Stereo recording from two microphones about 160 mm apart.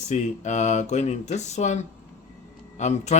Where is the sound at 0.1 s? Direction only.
45° left (ahead or behind).